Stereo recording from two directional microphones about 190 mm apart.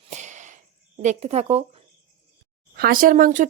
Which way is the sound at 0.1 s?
40° right (ahead or behind).